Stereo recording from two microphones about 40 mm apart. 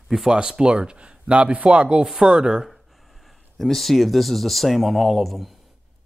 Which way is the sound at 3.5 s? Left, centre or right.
Centre.